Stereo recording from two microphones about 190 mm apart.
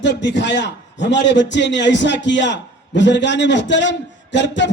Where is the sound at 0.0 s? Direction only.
65° left (ahead or behind).